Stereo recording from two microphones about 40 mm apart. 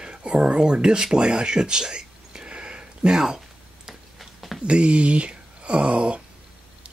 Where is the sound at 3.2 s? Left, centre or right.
Centre.